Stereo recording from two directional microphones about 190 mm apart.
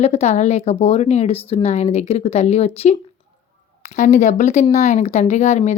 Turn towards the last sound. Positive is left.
turn(degrees=35)  # may be behind; listen again after turning